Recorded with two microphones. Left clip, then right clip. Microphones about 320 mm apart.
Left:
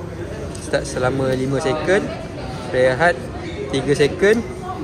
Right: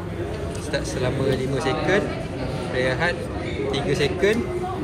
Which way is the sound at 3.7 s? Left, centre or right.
Left.